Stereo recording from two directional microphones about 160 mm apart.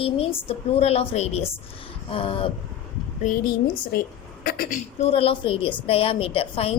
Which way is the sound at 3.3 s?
45° left (ahead or behind).